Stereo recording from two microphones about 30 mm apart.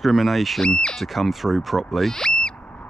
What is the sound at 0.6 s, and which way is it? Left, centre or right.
Speech, left.